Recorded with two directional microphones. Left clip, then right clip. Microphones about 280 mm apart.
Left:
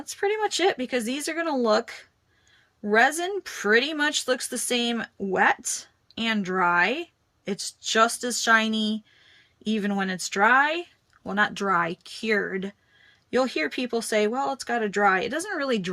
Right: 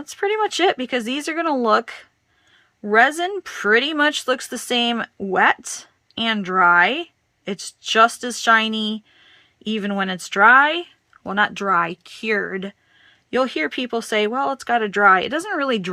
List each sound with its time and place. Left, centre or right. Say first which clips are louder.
0.1 s a woman's voice: right 5 dB; centre